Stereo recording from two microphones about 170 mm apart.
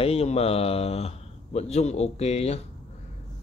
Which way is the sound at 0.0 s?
35° left (ahead or behind).